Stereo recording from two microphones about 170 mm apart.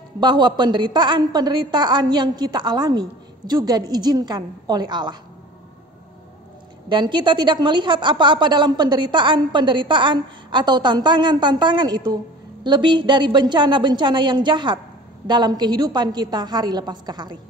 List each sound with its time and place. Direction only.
0.2 s a woman's voice: 25° right (ahead or behind)
6.9 s a woman's voice: 25° right (ahead or behind)